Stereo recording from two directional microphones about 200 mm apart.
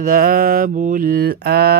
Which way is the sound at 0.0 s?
45° right (ahead or behind).